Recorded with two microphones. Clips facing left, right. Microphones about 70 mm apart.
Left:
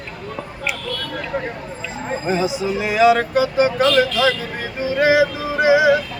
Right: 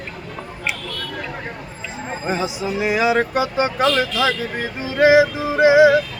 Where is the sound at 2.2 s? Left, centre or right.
Centre.